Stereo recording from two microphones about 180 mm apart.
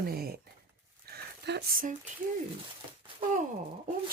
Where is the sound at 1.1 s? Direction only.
60° right (ahead or behind).